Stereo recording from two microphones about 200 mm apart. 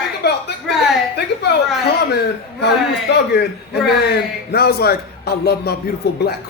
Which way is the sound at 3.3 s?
55° left (ahead or behind).